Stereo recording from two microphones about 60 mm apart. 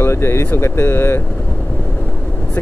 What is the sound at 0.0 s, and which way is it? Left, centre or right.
Speech, left.